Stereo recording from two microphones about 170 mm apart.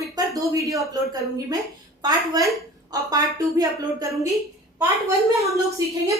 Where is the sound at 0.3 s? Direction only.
20° right (ahead or behind).